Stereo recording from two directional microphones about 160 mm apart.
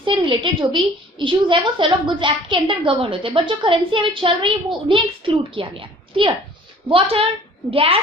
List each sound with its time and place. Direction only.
0.0 s a woman's voice: 30° right (ahead or behind)